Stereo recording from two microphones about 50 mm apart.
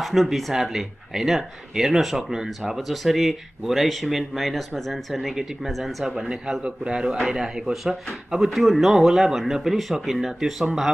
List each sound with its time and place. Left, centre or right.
0.0 s speech: centre
6.0 s speech: centre